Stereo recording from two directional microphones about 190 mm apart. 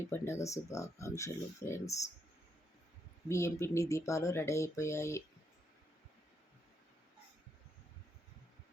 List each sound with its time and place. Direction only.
0.1 s speech: 15° left (ahead or behind)
3.2 s speech: 15° left (ahead or behind)